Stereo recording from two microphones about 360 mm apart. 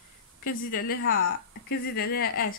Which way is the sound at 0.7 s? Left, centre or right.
Left.